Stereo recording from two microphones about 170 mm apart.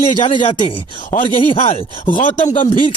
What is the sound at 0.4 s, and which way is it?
Speech, 45° left (ahead or behind).